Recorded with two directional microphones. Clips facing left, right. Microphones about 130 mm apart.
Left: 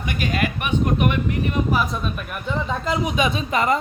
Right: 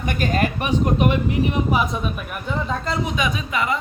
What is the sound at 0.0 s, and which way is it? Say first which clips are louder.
Speech: right 2 dB; 45° right (ahead or behind).